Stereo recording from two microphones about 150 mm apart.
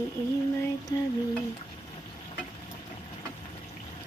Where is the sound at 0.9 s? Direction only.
30° left (ahead or behind).